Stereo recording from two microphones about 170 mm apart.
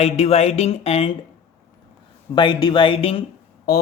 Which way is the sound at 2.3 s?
25° left (ahead or behind).